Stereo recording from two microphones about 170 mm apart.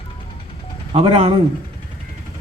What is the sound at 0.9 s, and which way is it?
Speech, 35° right (ahead or behind).